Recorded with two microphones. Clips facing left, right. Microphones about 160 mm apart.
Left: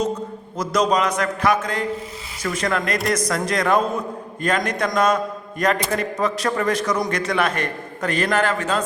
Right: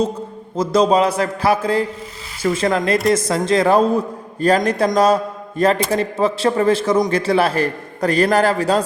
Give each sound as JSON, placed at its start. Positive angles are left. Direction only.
{"t": 0.5, "sound": "a man's voice", "side_deg": -30}